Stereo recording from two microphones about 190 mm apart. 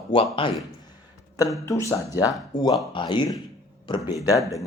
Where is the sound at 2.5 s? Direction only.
40° left (ahead or behind).